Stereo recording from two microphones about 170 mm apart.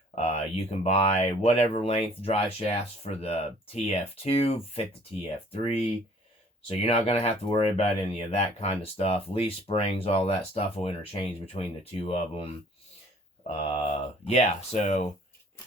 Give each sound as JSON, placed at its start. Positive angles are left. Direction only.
{"t": 0.2, "sound": "speech", "side_deg": 35}
{"t": 13.6, "sound": "speech", "side_deg": 40}